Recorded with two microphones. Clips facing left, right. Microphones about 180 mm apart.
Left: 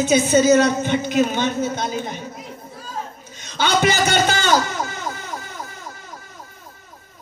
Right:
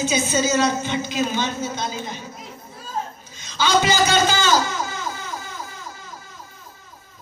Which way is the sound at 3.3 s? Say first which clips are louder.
Even; 60° left (ahead or behind).